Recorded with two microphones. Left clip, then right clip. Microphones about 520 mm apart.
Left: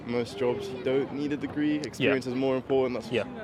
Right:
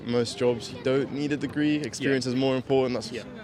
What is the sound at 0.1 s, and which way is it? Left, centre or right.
Speech, right.